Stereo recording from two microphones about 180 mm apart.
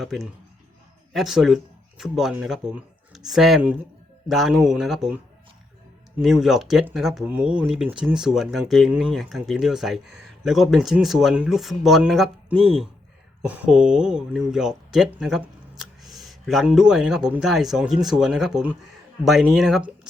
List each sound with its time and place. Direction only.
0.0 s speech: centre (ahead or behind)